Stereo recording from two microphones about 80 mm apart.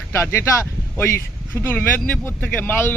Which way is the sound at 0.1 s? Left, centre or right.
Left.